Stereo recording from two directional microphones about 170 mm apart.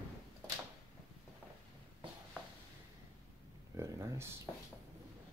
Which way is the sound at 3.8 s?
15° right (ahead or behind).